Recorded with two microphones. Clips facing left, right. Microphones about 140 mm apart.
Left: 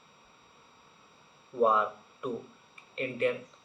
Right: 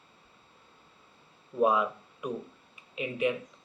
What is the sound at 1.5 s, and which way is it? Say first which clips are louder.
Speech: even; 5° right (ahead or behind).